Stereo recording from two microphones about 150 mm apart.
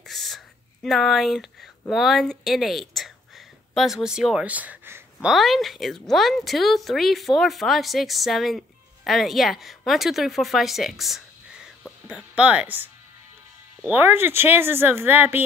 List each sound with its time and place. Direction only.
0.0 s a sound: centre (ahead or behind)
0.8 s speech: centre (ahead or behind)
5.3 s speech: centre (ahead or behind)